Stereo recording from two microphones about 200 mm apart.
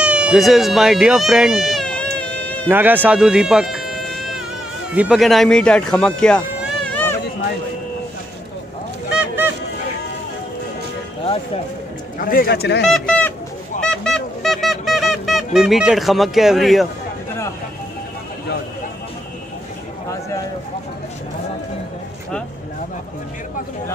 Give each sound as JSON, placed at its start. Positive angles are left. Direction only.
{"t": 0.0, "sound": "cat", "side_deg": -5}
{"t": 2.7, "sound": "speech", "side_deg": -10}
{"t": 12.2, "sound": "speech", "side_deg": 45}
{"t": 12.8, "sound": "chicken", "side_deg": 5}
{"t": 13.7, "sound": "music", "side_deg": 5}